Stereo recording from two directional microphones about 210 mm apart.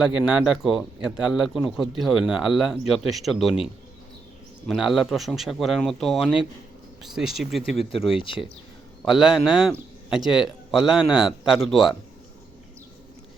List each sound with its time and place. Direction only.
0.0 s speech: 5° right (ahead or behind)
4.7 s speech: centre (ahead or behind)
7.9 s speech: 25° left (ahead or behind)
9.0 s speech: centre (ahead or behind)
10.2 s speech: 20° left (ahead or behind)
10.7 s speech: centre (ahead or behind)